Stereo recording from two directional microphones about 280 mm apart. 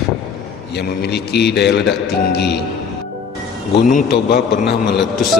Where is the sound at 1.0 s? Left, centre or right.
Left.